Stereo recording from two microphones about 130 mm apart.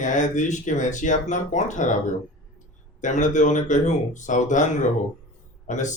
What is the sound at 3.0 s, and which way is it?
A man's voice, 70° left (ahead or behind).